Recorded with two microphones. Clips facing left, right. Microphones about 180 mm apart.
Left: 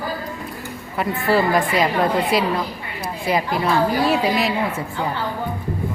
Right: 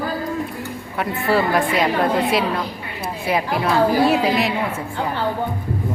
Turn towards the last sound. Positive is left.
turn(degrees=0)  # may be behind; listen again after turning